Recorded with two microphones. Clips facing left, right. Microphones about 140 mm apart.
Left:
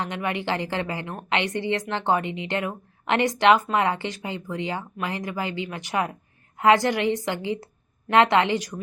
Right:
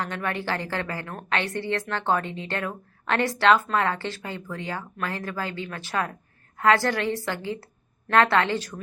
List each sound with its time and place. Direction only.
0.0 s a woman's voice: 20° left (ahead or behind)